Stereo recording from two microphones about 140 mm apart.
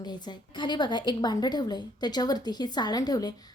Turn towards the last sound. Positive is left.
turn(degrees=30)  # may be behind; listen again after turning